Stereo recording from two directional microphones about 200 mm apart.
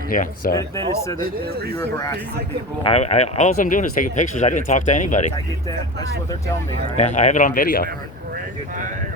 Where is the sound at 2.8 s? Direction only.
30° left (ahead or behind).